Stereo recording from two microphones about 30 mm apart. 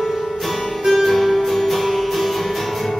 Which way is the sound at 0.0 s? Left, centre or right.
Centre.